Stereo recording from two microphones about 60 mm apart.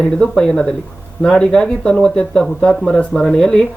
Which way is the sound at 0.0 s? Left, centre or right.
Centre.